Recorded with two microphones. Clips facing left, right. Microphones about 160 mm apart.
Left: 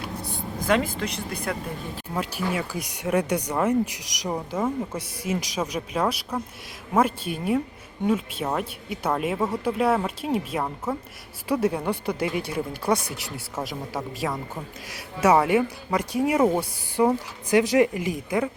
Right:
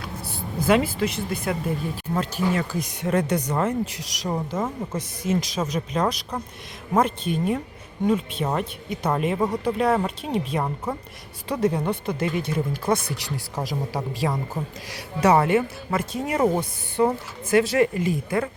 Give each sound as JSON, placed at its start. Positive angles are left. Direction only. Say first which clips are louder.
{"t": 0.3, "sound": "speech", "louder": "right 3 dB", "side_deg": -5}
{"t": 2.1, "sound": "speech", "louder": "right 3 dB", "side_deg": 10}
{"t": 4.3, "sound": "speech", "louder": "even", "side_deg": 5}